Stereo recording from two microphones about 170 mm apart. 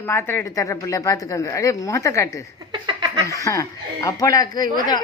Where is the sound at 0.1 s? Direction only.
15° left (ahead or behind).